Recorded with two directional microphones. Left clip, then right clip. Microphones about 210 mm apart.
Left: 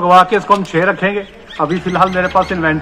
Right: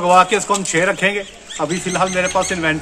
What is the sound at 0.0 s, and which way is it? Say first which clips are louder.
A man's voice: left 3 dB; 25° right (ahead or behind).